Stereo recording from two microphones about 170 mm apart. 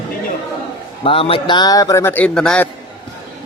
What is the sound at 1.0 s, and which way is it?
Music, 35° left (ahead or behind).